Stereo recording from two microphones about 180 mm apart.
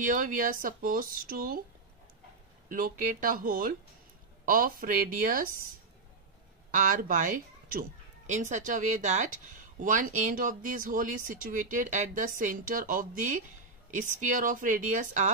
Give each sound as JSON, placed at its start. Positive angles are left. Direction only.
{"t": 0.0, "sound": "speech", "side_deg": -50}
{"t": 2.7, "sound": "speech", "side_deg": -50}
{"t": 6.7, "sound": "speech", "side_deg": -45}